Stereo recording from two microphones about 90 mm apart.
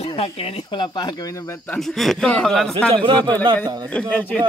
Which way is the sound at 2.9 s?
70° right (ahead or behind).